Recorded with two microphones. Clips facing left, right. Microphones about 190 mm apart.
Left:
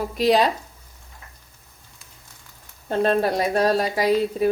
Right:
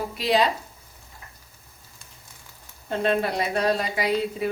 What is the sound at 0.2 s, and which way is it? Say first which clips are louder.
Speech: left 4 dB; 45° left (ahead or behind).